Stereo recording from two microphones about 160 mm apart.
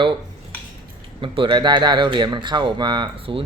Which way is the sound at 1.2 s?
30° right (ahead or behind).